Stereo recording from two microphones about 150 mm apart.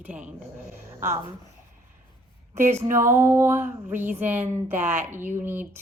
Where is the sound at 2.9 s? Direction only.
15° right (ahead or behind).